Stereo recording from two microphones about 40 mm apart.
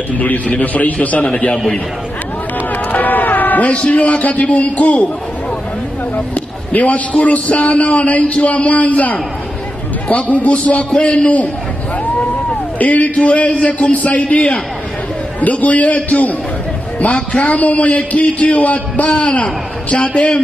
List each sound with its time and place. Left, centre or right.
0.2 s a man's voice: left
1.2 s a man's voice: left
2.9 s a sound: left
3.6 s a man's voice: left
6.1 s a sound: left
6.9 s a man's voice: left
12.7 s a man's voice: left
13.1 s a man's voice: left
17.1 s a man's voice: left
17.5 s a man's voice: left